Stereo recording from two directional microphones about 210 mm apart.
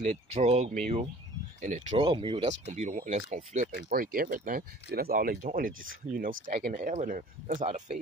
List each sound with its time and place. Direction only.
0.0 s speech: 30° right (ahead or behind)
2.0 s speech: 25° right (ahead or behind)